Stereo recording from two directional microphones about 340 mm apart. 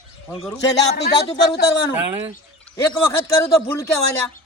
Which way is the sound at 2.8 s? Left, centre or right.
Centre.